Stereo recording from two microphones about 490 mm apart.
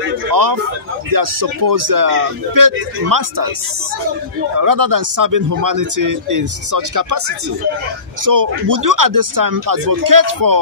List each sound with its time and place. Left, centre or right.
0.3 s a man's voice: right
4.6 s a man's voice: right